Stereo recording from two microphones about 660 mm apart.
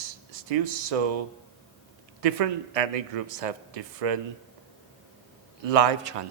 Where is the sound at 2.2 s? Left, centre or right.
Right.